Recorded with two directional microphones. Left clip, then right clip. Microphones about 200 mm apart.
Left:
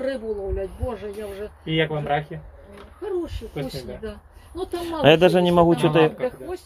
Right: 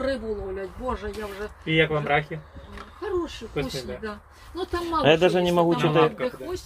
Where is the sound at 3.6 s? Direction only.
30° left (ahead or behind).